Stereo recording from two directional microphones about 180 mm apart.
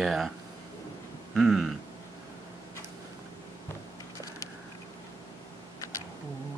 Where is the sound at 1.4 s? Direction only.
Centre (ahead or behind).